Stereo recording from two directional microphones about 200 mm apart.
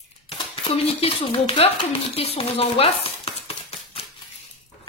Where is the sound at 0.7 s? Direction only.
30° left (ahead or behind).